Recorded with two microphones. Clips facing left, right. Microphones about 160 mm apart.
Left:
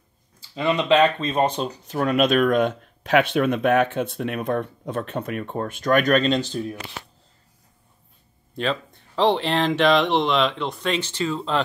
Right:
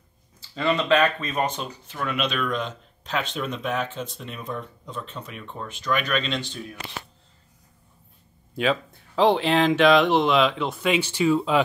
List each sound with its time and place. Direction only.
0.4 s speech: 15° left (ahead or behind); by 6.8 s 40° left (ahead or behind)
8.5 s speech: 5° right (ahead or behind)